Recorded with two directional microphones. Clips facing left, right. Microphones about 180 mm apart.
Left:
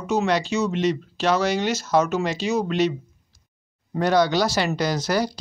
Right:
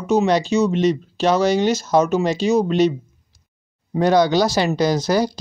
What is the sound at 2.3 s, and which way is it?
Speech, 40° right (ahead or behind).